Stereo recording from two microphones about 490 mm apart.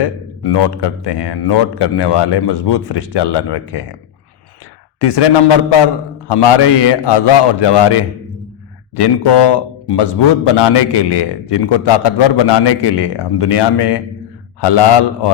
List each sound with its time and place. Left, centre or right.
0.0 s a man's voice: left
4.9 s a man's voice: left